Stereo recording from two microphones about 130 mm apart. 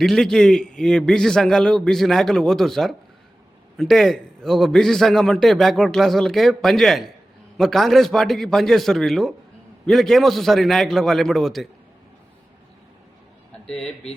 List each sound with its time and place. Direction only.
0.0 s a man's voice: centre (ahead or behind)
13.7 s speech: 5° left (ahead or behind)